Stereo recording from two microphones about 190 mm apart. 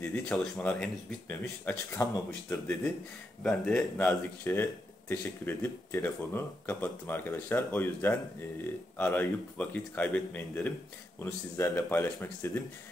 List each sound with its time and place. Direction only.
0.0 s speech: 5° left (ahead or behind)